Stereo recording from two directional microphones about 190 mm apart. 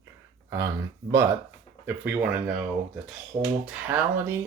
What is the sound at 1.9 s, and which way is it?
Speech, 10° right (ahead or behind).